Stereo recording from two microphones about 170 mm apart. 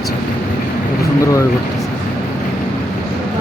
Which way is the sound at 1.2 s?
20° left (ahead or behind).